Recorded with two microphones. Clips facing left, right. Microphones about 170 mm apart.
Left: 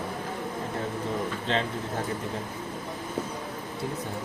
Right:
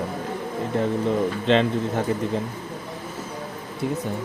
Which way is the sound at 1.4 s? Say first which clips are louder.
Right 10 dB; 80° right.